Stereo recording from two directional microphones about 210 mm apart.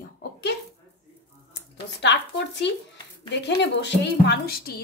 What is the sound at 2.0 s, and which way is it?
A woman's voice, 55° left (ahead or behind).